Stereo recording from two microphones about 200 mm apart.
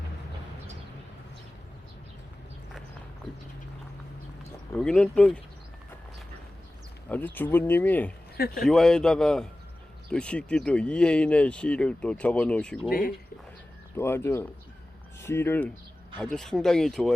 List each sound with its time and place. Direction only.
4.7 s speech: 5° left (ahead or behind)
7.1 s speech: 10° left (ahead or behind)
12.9 s speech: 45° left (ahead or behind)
13.9 s speech: 10° left (ahead or behind)